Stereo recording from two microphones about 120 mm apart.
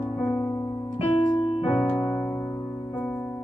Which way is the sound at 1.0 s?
50° left (ahead or behind).